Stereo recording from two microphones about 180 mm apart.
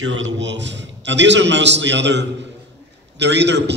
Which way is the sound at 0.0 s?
85° right.